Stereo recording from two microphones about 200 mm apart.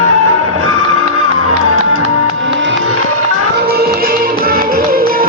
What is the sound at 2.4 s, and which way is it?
Music, 65° right (ahead or behind).